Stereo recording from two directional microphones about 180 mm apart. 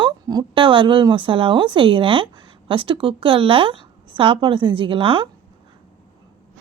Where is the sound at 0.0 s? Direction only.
25° right (ahead or behind).